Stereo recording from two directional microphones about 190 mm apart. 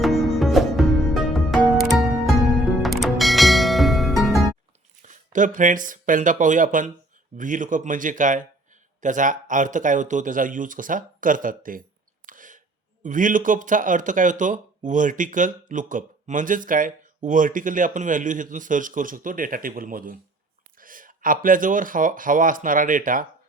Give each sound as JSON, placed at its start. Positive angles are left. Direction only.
{"t": 0.0, "sound": "music", "side_deg": 0}
{"t": 5.0, "sound": "a man's voice", "side_deg": -45}